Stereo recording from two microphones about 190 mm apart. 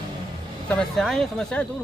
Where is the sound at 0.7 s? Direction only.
5° left (ahead or behind).